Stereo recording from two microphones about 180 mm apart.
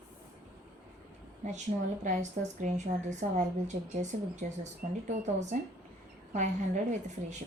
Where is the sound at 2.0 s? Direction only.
40° right (ahead or behind).